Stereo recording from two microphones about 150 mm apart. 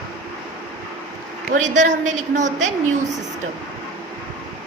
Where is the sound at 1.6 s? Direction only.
55° right (ahead or behind).